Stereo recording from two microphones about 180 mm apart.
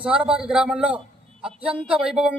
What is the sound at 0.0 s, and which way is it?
A man's voice, 5° right (ahead or behind).